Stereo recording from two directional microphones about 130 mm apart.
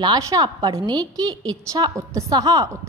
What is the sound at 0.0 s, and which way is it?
A woman's voice, 30° right (ahead or behind).